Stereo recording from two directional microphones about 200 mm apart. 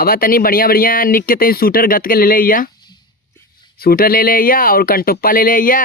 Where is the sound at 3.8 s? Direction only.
50° left (ahead or behind).